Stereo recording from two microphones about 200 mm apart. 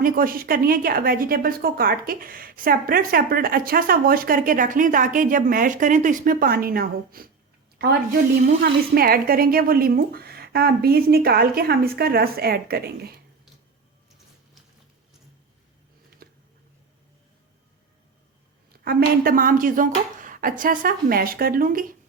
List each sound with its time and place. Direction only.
0.0 s a woman's voice: 45° right (ahead or behind)
8.6 s a woman's voice: 50° right (ahead or behind)
18.7 s a woman's voice: 50° right (ahead or behind)